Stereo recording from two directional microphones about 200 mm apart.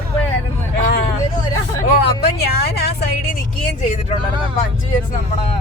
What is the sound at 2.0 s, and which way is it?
Speech, 55° left (ahead or behind).